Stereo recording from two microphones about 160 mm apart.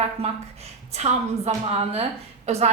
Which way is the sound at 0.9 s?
45° right (ahead or behind).